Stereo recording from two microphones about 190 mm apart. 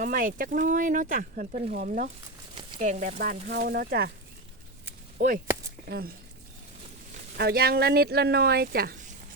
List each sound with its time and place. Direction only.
0.0 s speech: 45° right (ahead or behind)
5.1 s speech: 45° right (ahead or behind)
5.8 s speech: 60° right (ahead or behind)
7.3 s speech: 55° right (ahead or behind)